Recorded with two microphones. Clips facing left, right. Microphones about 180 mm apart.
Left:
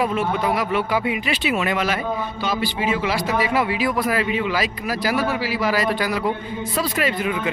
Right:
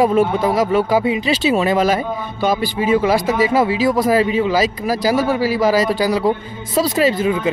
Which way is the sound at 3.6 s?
30° right (ahead or behind).